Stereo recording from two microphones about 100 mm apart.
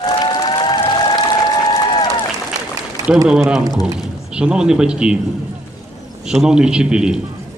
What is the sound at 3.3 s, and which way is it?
A man's voice, 5° right (ahead or behind).